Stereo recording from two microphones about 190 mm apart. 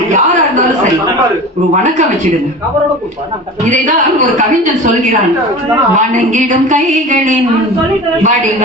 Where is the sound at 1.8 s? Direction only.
40° right (ahead or behind).